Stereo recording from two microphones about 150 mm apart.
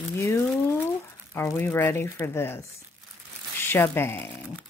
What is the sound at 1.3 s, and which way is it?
Speech, 20° left (ahead or behind).